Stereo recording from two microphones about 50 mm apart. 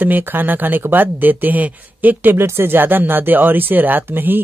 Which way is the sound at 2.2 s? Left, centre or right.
Right.